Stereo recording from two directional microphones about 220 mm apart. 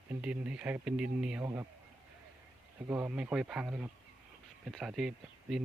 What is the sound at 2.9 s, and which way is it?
Speech, 10° right (ahead or behind).